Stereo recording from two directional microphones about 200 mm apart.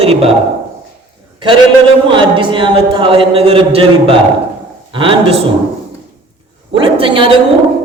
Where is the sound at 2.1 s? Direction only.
25° right (ahead or behind).